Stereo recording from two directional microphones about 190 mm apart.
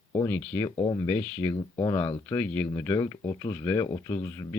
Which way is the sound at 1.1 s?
10° left (ahead or behind).